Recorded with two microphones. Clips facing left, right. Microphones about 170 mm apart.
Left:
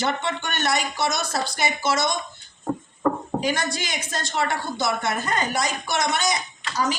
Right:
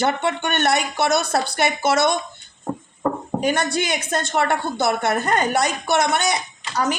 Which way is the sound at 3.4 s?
60° right (ahead or behind).